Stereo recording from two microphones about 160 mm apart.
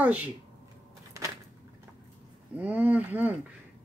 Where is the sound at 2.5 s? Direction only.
10° right (ahead or behind).